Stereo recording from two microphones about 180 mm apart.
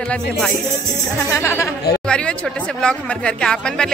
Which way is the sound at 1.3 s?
15° left (ahead or behind).